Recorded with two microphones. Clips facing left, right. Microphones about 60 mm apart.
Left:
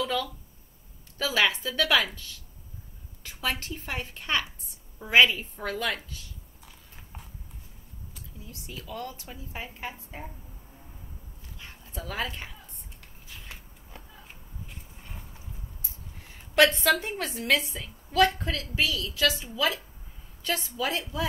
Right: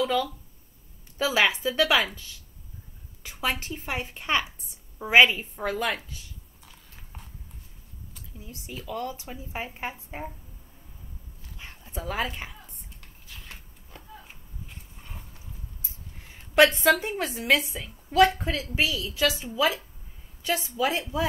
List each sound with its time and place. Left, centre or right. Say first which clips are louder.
0.0 s a woman's voice: right 4 dB; centre
3.3 s a woman's voice: right 2 dB; centre
6.6 s biting: even; centre
8.5 s a woman's voice: right 3 dB; right
9.1 s a woman's voice: right 4 dB; centre
11.8 s speech: right 3 dB; centre
13.3 s a sound: even; centre
16.3 s a woman's voice: right 2 dB; centre